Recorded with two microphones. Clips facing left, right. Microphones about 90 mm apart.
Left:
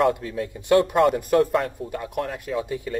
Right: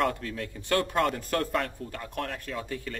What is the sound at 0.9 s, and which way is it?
A man's voice, 5° left (ahead or behind).